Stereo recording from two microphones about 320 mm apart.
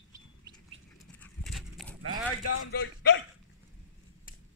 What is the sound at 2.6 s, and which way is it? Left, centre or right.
Speech, left.